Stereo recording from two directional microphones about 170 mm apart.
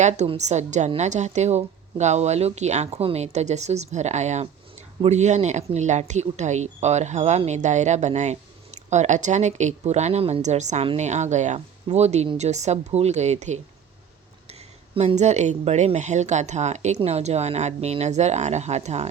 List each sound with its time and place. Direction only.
0.0 s a woman's voice: 40° right (ahead or behind)
14.9 s a woman's voice: 40° right (ahead or behind)